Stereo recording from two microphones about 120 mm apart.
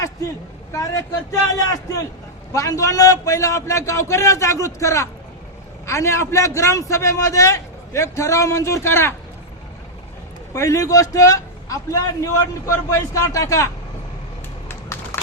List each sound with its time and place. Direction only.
0.7 s a man's voice: 30° left (ahead or behind)
10.5 s a man's voice: 25° left (ahead or behind)
14.7 s typing: 20° left (ahead or behind)